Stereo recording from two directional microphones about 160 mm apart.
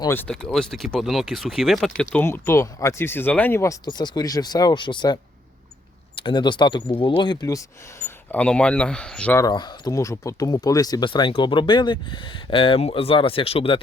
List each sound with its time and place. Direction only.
0.1 s speech: 10° left (ahead or behind)
2.2 s speech: 15° left (ahead or behind)
9.4 s speech: 25° left (ahead or behind)